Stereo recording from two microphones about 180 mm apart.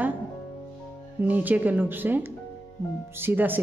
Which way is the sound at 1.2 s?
10° right (ahead or behind).